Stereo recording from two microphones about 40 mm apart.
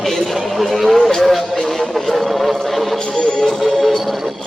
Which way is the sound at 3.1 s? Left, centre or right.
Centre.